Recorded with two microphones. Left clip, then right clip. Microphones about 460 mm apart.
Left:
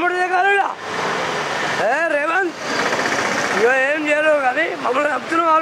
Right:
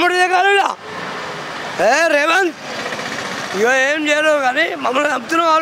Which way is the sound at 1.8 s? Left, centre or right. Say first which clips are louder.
Right 7 dB; right.